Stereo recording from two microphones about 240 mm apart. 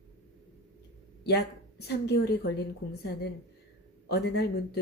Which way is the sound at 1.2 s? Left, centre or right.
Left.